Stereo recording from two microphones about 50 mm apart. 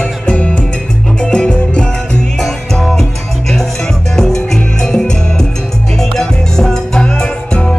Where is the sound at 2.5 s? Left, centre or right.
Centre.